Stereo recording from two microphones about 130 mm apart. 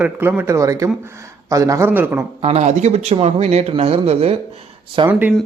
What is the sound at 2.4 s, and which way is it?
Speech, 55° right (ahead or behind).